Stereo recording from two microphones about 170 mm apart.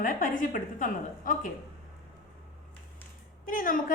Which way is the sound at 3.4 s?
55° left (ahead or behind).